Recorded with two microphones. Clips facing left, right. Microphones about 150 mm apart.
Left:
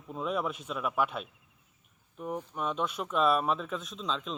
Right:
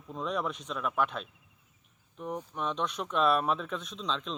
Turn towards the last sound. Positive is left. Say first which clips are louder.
# even
turn(degrees=5)  # may be behind; listen again after turning